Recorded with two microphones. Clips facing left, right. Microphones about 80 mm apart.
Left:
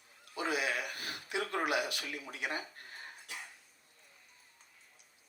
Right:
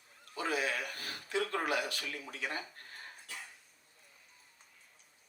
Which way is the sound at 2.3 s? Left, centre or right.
Centre.